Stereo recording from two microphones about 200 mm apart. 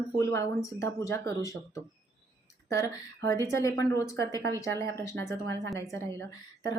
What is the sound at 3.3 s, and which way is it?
A woman's voice, 15° left (ahead or behind).